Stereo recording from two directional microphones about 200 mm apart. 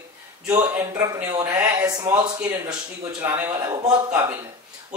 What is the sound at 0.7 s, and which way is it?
Speech, 10° right (ahead or behind).